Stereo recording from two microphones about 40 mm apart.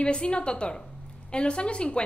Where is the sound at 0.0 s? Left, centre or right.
Left.